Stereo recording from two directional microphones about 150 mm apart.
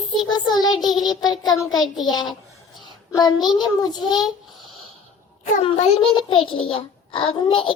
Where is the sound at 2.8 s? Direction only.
25° left (ahead or behind).